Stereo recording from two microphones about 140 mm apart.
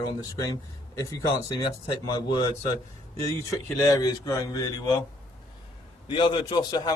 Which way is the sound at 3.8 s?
25° left (ahead or behind).